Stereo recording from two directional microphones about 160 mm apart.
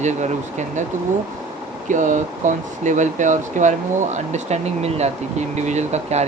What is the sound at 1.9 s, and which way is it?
Speech, 50° right (ahead or behind).